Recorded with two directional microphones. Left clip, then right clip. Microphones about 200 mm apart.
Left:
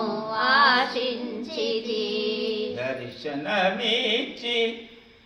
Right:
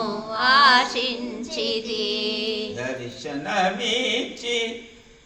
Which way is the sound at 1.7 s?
40° right (ahead or behind).